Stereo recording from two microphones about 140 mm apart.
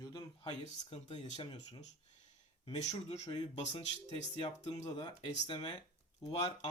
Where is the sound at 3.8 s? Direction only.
55° left (ahead or behind).